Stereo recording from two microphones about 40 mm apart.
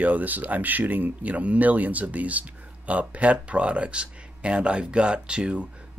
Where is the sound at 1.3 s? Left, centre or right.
Right.